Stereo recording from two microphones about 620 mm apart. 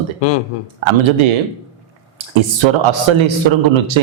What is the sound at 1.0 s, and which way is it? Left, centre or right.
Speech, right.